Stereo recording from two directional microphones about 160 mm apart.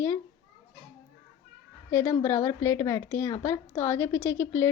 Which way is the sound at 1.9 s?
20° left (ahead or behind).